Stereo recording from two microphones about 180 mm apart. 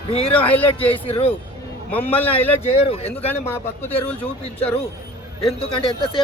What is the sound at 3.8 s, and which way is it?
Speech, 10° left (ahead or behind).